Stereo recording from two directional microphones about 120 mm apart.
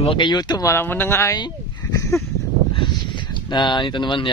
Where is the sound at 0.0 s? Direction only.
45° left (ahead or behind).